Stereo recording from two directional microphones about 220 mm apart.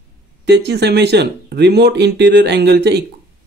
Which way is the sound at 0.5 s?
50° right (ahead or behind).